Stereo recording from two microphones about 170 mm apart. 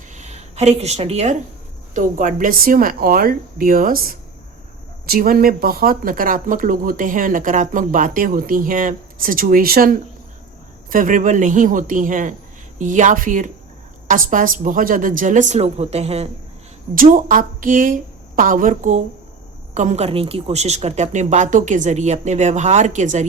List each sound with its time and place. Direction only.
0.1 s a sound: 40° right (ahead or behind)
1.9 s a woman's voice: 50° right (ahead or behind)
16.9 s a woman's voice: 55° right (ahead or behind)